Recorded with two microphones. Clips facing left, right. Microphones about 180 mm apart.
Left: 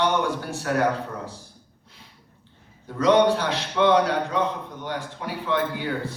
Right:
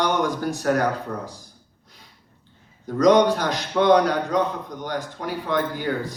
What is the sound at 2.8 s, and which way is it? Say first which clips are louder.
A man's voice: right 2 dB; 40° right (ahead or behind).